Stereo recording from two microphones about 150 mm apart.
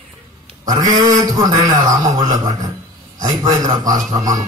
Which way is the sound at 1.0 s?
25° right (ahead or behind).